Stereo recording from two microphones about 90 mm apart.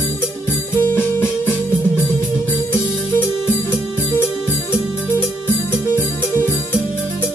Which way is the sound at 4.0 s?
25° left (ahead or behind).